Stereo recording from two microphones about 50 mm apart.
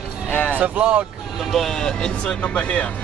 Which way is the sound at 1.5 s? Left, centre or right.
Centre.